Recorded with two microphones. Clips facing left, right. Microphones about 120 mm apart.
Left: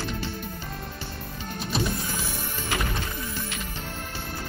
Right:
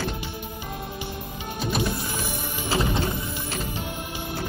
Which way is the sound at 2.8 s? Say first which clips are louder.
Right 7 dB; 20° right (ahead or behind).